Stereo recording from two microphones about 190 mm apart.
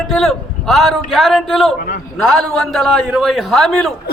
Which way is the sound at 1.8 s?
50° left (ahead or behind).